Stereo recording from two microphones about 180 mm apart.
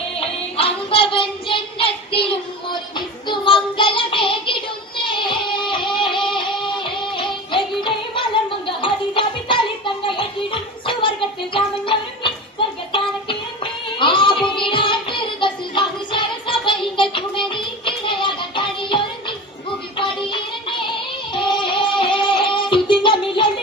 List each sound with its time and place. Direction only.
0.2 s child singing: 30° left (ahead or behind)
2.9 s music: 25° left (ahead or behind)
10.2 s a sound: 30° left (ahead or behind)
11.5 s music: 30° left (ahead or behind)